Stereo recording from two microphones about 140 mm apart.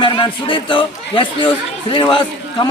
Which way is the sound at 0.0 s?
40° left (ahead or behind).